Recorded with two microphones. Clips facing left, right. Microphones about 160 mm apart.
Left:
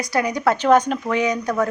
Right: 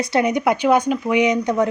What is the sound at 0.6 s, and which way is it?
A woman's voice, 10° right (ahead or behind).